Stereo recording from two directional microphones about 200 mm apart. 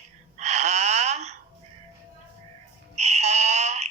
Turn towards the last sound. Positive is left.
turn(degrees=-35)  # may be behind; listen again after turning